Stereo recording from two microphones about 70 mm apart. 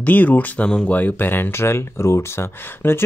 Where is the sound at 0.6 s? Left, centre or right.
Centre.